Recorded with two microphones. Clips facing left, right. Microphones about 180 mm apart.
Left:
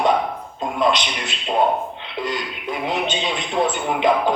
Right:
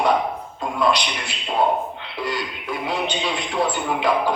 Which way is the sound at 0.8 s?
20° left (ahead or behind).